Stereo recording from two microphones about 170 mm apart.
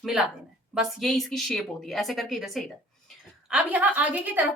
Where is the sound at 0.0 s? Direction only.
5° right (ahead or behind).